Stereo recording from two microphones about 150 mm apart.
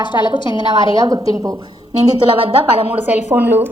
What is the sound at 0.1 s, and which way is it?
Speech, 30° left (ahead or behind).